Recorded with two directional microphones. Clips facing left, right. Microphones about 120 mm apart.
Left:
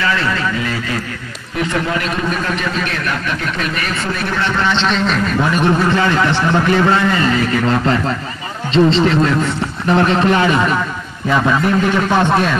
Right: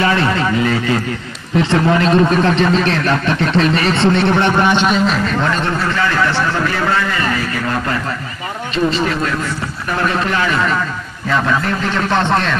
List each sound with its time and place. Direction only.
0.0 s a man's voice: 25° right (ahead or behind); by 5.2 s 5° right (ahead or behind)
5.4 s a man's voice: 15° left (ahead or behind)
8.7 s a man's voice: 25° left (ahead or behind); by 12.5 s 10° left (ahead or behind)